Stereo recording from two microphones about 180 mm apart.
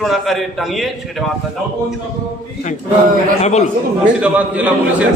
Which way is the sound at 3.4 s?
40° left (ahead or behind).